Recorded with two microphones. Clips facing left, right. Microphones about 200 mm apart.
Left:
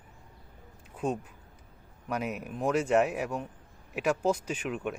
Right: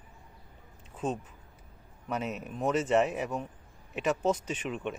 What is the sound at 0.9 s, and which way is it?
Speech, 10° left (ahead or behind).